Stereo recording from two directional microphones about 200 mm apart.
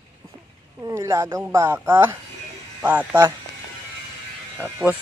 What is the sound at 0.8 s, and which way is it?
Speech, 15° right (ahead or behind).